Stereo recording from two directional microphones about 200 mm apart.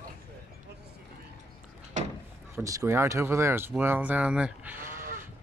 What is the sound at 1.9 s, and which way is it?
Drawer open or close, 35° right (ahead or behind).